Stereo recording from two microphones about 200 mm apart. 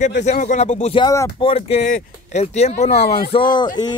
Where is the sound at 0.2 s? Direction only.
35° left (ahead or behind).